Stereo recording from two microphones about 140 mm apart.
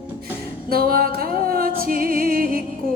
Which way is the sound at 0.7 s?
90° right.